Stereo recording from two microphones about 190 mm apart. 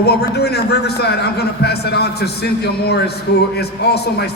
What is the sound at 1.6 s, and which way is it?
A man's voice, 60° left (ahead or behind).